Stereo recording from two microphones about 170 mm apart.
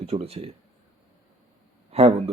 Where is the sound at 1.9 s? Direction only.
35° right (ahead or behind).